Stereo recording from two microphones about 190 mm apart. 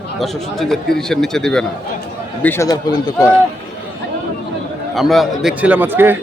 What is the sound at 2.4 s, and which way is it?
Speech, 15° left (ahead or behind).